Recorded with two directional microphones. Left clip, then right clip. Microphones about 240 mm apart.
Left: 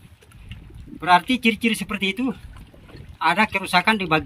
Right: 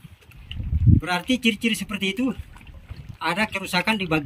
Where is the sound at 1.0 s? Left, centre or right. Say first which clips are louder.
Left 9 dB; centre.